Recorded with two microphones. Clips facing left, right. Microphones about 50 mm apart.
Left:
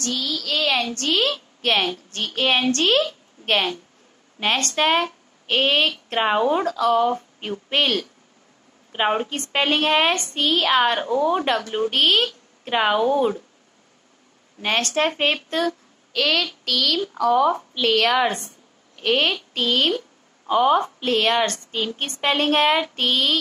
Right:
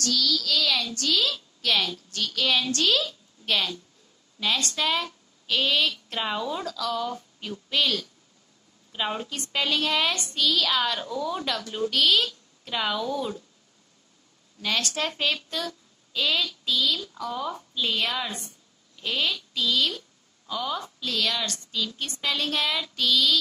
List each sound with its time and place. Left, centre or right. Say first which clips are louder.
0.0 s a woman's voice: even; left
14.6 s a woman's voice: left 7 dB; left
16.1 s a woman's voice: left 5 dB; left
17.0 s speech: left 13 dB; left
17.8 s a woman's voice: left 10 dB; left